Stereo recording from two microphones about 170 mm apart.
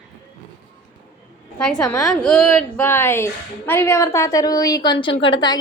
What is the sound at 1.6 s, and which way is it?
A woman's voice, 5° left (ahead or behind).